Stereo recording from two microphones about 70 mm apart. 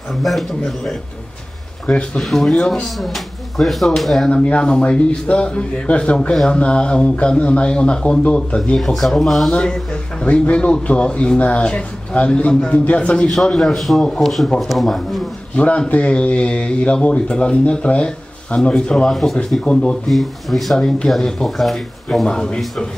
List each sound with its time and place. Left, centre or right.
0.1 s speech: centre
1.9 s speech: centre
2.2 s speech: centre
4.3 s speech: centre
13.6 s speech: centre
15.5 s speech: centre
19.0 s speech: centre
19.6 s speech: centre
20.1 s speech: centre